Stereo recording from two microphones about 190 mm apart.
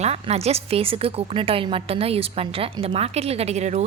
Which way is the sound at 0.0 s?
35° right (ahead or behind).